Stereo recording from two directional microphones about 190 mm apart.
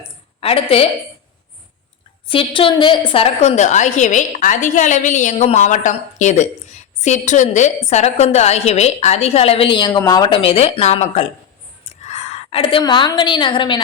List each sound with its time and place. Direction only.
0.3 s a woman's voice: 30° left (ahead or behind)
2.2 s a woman's voice: 30° left (ahead or behind)